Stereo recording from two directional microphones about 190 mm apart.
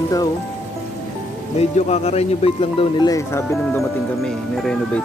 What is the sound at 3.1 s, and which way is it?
Speech, 15° left (ahead or behind).